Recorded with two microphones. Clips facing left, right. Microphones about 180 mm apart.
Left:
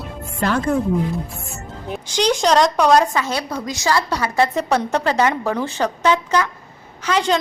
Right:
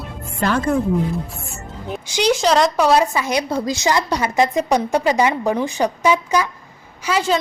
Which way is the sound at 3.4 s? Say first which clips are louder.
Right 3 dB; 30° right (ahead or behind).